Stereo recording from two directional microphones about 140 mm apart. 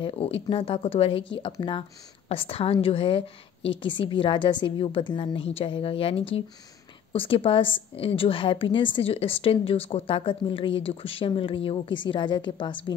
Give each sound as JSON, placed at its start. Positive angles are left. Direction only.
{"t": 0.0, "sound": "speech", "side_deg": 40}